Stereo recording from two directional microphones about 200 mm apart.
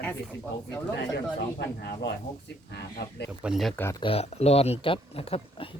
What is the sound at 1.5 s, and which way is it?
Speech, 55° left (ahead or behind).